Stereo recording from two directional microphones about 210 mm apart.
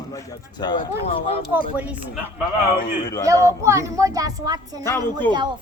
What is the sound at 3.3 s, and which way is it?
A woman's voice, 15° right (ahead or behind).